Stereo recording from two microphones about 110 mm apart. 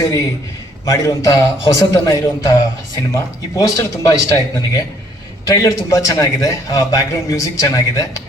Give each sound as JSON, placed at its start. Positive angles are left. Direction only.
{"t": 0.9, "sound": "a man's voice", "side_deg": 30}